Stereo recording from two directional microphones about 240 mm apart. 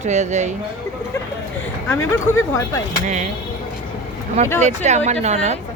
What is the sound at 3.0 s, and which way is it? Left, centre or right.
Speech, right.